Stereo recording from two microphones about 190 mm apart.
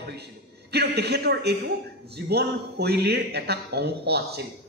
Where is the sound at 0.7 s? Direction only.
60° right (ahead or behind).